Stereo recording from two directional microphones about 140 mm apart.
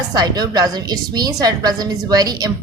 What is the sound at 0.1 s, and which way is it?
A woman's voice, 30° right (ahead or behind).